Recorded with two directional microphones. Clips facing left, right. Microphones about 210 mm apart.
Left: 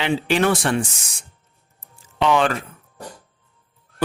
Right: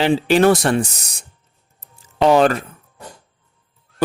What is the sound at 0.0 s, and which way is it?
Speech, 35° right (ahead or behind).